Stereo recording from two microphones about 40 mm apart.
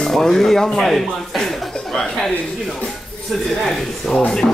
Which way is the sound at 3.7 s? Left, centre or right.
Centre.